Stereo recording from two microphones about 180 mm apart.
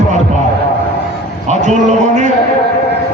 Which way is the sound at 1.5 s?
40° right (ahead or behind).